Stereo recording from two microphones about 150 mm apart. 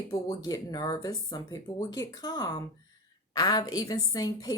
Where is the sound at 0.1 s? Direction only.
20° left (ahead or behind).